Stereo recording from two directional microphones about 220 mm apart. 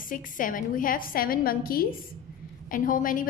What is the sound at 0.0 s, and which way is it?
A woman's voice, 35° left (ahead or behind).